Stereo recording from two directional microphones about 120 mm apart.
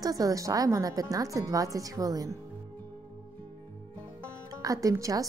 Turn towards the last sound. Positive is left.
turn(degrees=-30)  # may be behind; listen again after turning